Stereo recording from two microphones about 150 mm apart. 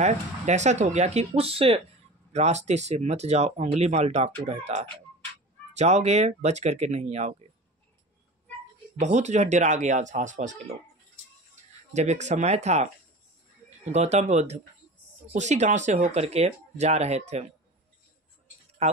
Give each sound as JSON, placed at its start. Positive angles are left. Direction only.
{"t": 0.0, "sound": "speech", "side_deg": -50}
{"t": 9.0, "sound": "speech", "side_deg": -50}
{"t": 11.9, "sound": "speech", "side_deg": -50}
{"t": 13.9, "sound": "speech", "side_deg": -45}
{"t": 18.8, "sound": "speech", "side_deg": -45}